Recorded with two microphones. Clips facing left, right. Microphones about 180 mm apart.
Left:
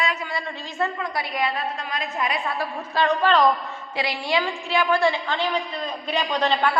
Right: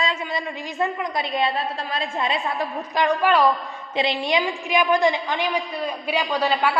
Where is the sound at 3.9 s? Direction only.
20° right (ahead or behind).